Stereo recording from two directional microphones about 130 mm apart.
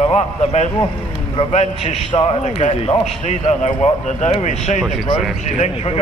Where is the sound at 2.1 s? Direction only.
45° left (ahead or behind).